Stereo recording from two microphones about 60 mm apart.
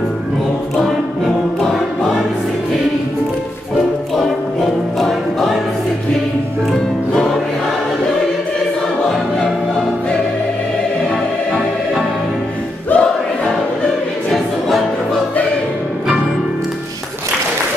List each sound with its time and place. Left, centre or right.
0.7 s music: centre
3.7 s music: centre
12.9 s choir: left